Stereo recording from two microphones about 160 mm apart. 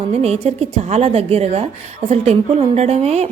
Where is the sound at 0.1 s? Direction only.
40° right (ahead or behind).